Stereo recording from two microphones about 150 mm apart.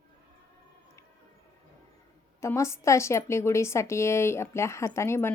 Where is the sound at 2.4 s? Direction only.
20° left (ahead or behind).